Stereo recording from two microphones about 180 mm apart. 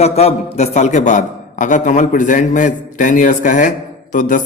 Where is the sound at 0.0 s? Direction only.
35° left (ahead or behind).